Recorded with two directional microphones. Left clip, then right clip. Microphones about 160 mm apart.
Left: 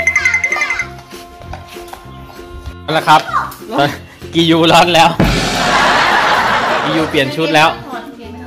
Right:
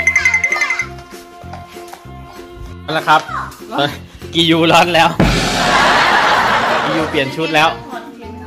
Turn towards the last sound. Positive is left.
turn(degrees=0)  # may be behind; listen again after turning